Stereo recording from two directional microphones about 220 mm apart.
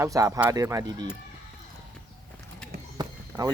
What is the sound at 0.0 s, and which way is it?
Speech, 15° right (ahead or behind).